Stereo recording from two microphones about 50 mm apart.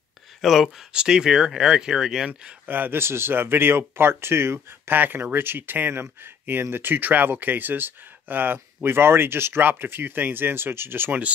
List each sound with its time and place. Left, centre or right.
0.4 s speech: centre
0.9 s speech: centre
2.6 s speech: right
3.0 s speech: right
4.9 s speech: right
11.1 s speech: right